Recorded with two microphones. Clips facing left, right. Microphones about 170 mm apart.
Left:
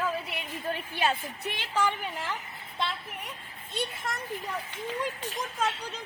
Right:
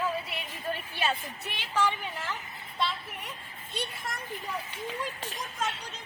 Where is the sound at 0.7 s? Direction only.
15° left (ahead or behind).